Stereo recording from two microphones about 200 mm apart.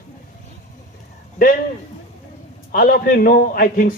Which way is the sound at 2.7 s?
45° left (ahead or behind).